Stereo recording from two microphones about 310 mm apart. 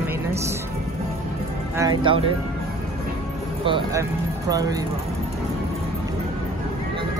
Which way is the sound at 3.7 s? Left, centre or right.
Centre.